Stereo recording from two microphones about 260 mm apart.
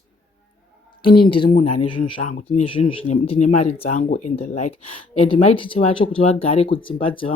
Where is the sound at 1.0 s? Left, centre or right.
Left.